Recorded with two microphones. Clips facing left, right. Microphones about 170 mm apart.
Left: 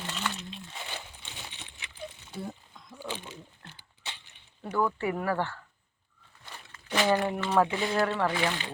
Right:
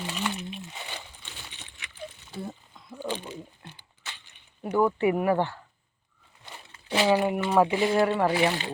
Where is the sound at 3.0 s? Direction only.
20° right (ahead or behind).